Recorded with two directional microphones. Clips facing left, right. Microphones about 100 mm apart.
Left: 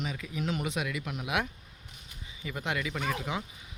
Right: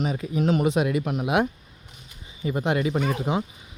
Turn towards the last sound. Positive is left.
turn(degrees=-30)  # may be behind; listen again after turning